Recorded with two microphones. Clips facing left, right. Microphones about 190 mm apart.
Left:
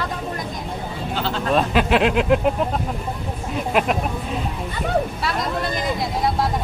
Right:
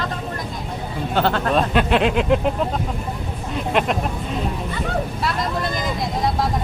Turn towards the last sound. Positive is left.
turn(degrees=0)  # may be behind; listen again after turning